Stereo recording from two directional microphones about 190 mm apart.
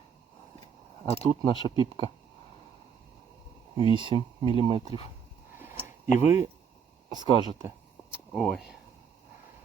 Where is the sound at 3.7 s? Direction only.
25° right (ahead or behind).